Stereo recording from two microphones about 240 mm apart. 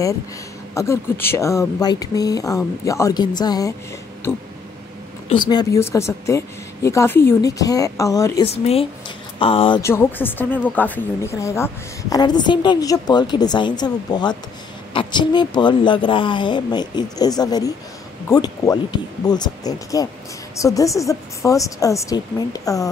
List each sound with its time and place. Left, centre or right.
0.7 s speech: centre
5.5 s speech: centre
8.5 s speech: left